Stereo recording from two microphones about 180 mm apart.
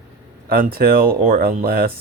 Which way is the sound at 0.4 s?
55° right (ahead or behind).